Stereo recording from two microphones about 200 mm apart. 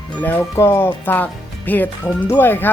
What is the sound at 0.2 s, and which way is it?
Speech, 10° left (ahead or behind).